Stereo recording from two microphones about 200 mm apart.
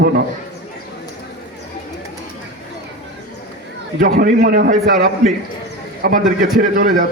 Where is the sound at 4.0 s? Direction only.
45° right (ahead or behind).